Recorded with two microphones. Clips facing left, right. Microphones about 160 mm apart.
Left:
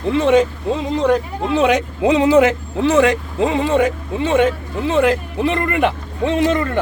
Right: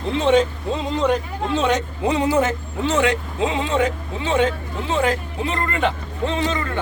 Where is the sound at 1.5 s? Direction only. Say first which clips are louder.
Left 5 dB; 90° left.